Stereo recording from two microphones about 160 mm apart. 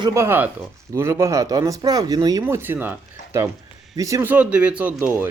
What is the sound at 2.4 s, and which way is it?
Speech, 15° right (ahead or behind).